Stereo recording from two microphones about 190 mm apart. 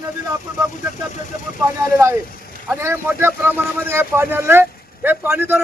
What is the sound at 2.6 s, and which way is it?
Speech, 15° right (ahead or behind).